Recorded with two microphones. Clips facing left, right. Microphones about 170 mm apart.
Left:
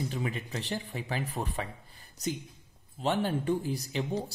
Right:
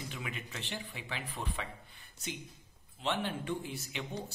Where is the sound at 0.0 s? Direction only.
35° left (ahead or behind).